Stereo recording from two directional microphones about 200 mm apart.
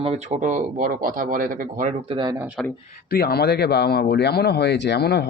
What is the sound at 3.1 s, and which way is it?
Speech, 50° left (ahead or behind).